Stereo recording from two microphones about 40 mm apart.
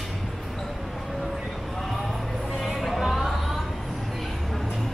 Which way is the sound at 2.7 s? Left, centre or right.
Centre.